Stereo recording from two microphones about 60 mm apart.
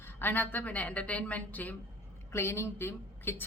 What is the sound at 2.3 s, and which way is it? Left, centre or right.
Speech, left.